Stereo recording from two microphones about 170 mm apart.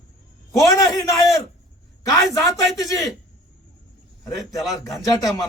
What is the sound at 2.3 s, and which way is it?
Speech, 20° left (ahead or behind).